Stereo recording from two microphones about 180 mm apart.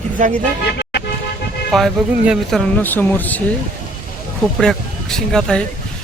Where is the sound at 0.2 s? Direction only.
45° right (ahead or behind).